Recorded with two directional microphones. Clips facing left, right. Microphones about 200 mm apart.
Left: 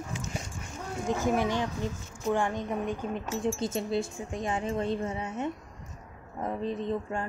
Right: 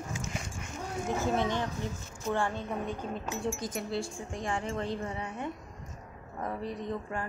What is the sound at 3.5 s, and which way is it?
A woman's voice, 25° left (ahead or behind).